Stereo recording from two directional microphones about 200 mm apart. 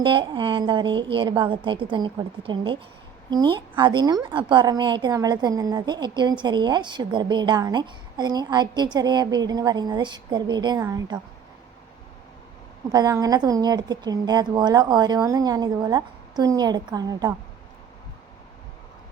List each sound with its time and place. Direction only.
0.0 s a woman's voice: 25° right (ahead or behind)
12.9 s a woman's voice: 15° right (ahead or behind)